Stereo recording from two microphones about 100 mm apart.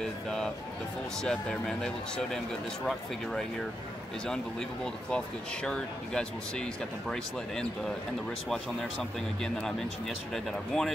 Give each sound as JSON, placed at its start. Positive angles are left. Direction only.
{"t": 0.0, "sound": "speech", "side_deg": 5}
{"t": 9.4, "sound": "speech", "side_deg": 5}